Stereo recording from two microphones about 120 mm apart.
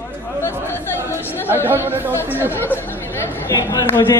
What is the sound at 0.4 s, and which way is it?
Chatter, 20° left (ahead or behind).